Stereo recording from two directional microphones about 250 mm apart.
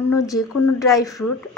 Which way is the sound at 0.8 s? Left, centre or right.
Centre.